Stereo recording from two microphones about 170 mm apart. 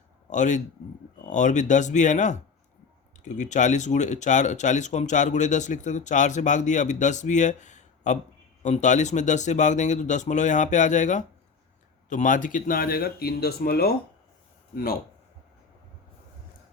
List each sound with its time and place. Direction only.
0.3 s speech: 45° left (ahead or behind); by 13.9 s 65° left (ahead or behind)